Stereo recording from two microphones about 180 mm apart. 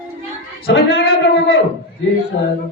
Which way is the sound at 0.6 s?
60° left (ahead or behind).